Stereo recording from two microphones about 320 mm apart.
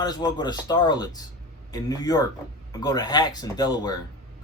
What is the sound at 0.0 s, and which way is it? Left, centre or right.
A man's voice, centre.